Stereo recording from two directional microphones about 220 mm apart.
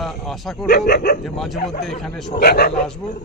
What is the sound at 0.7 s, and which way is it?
Wild animals, 45° left (ahead or behind).